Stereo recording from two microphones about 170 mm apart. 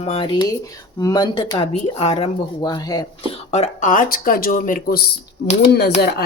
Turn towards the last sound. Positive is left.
turn(degrees=70)  # may be behind; listen again after turning